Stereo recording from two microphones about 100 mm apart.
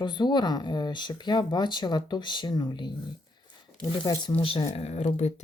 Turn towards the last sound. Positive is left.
turn(degrees=90)